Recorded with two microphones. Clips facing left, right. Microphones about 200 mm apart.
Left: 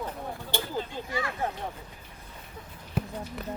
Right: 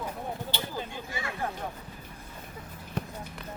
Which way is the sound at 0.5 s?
50° left (ahead or behind).